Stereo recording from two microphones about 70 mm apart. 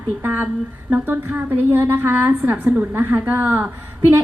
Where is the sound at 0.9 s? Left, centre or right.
Right.